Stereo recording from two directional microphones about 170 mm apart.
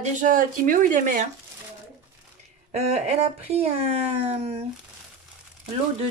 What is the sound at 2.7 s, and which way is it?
Speech, 40° right (ahead or behind).